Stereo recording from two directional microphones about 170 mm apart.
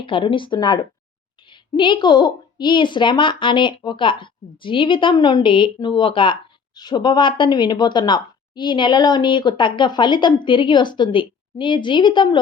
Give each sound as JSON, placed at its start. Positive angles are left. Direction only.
{"t": 0.0, "sound": "speech", "side_deg": 30}